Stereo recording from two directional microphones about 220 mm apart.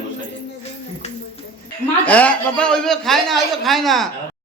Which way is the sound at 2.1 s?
5° left (ahead or behind).